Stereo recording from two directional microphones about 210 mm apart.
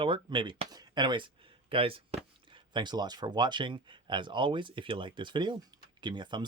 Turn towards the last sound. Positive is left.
turn(degrees=-20)  # may be behind; listen again after turning